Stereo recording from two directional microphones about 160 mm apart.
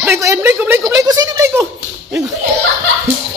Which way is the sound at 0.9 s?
20° right (ahead or behind).